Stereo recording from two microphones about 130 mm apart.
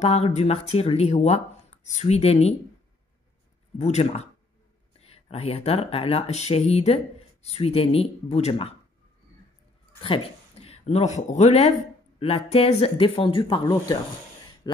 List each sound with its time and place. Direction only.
0.0 s speech: 60° left (ahead or behind)
3.7 s speech: 60° left (ahead or behind)
10.0 s speech: 45° left (ahead or behind); by 11.7 s 60° left (ahead or behind)
12.2 s speech: 50° left (ahead or behind)